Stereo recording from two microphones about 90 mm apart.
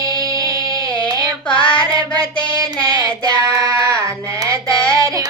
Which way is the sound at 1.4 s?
70° left (ahead or behind).